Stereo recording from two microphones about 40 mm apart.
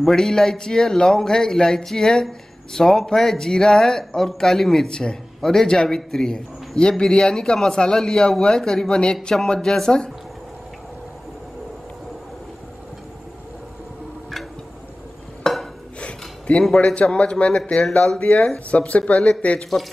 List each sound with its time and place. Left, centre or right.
0.0 s speech: centre
15.5 s dishes: centre
16.0 s a sound: left
16.7 s speech: left